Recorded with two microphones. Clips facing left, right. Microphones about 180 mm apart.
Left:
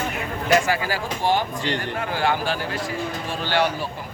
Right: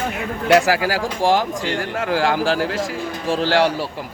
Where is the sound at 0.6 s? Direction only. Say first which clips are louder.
Right 5 dB; 85° right.